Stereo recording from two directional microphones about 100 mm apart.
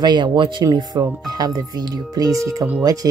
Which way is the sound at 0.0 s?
50° right (ahead or behind).